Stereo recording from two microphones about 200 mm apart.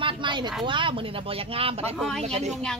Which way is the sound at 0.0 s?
25° right (ahead or behind).